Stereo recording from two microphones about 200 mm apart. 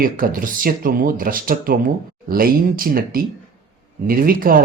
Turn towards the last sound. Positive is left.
turn(degrees=-45)  # may be behind; listen again after turning